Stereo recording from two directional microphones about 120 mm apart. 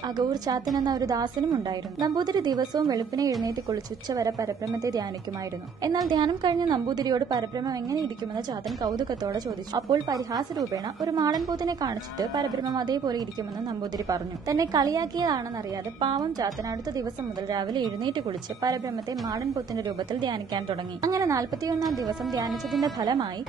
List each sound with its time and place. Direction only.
0.2 s a woman's voice: 35° right (ahead or behind)
22.9 s a woman's voice: 35° right (ahead or behind)